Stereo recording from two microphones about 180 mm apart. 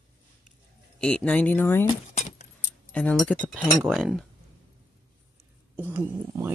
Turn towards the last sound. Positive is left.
turn(degrees=-15)  # may be behind; listen again after turning